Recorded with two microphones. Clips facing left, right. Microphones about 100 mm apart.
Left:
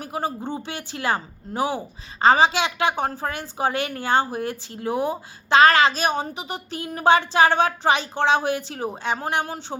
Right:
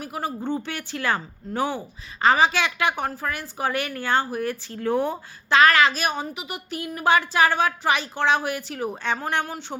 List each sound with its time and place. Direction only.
0.0 s a woman's voice: 25° left (ahead or behind)
0.4 s a woman's voice: 15° left (ahead or behind)
4.8 s a woman's voice: 10° left (ahead or behind)
5.5 s a woman's voice: 25° left (ahead or behind)